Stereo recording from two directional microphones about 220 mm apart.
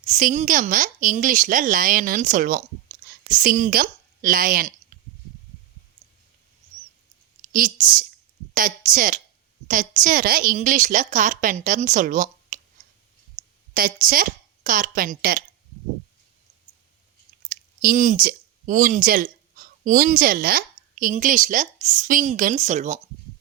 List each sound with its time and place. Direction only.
0.0 s a woman's voice: 35° right (ahead or behind)
7.4 s a woman's voice: 40° right (ahead or behind)
13.4 s a sound: 20° right (ahead or behind)
13.7 s a woman's voice: 40° right (ahead or behind)
17.5 s speech: 40° right (ahead or behind)